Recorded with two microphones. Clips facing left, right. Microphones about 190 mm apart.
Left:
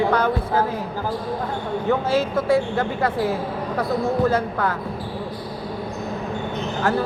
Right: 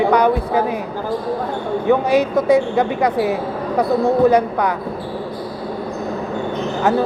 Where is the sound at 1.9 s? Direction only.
15° right (ahead or behind).